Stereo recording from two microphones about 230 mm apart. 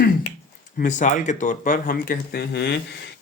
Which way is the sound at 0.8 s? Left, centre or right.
Left.